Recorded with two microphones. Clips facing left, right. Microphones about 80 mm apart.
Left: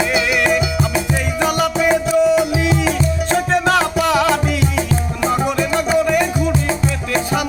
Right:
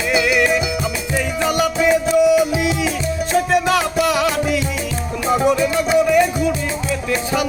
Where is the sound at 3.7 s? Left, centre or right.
Left.